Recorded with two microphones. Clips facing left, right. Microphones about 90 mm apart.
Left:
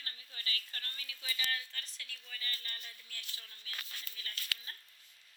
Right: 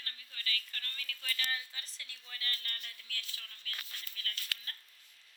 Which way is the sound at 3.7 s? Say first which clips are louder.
Even; 20° left (ahead or behind).